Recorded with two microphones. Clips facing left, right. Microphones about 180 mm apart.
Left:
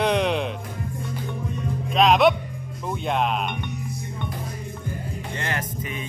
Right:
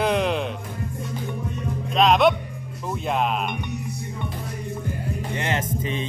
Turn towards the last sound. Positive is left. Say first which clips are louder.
# right 4 dB
turn(degrees=-25)  # may be behind; listen again after turning